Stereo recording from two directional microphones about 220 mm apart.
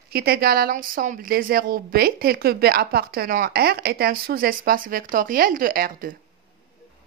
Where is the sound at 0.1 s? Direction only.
45° right (ahead or behind).